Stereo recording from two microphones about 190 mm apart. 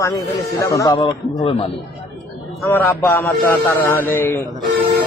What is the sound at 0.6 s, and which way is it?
Speech, 15° left (ahead or behind).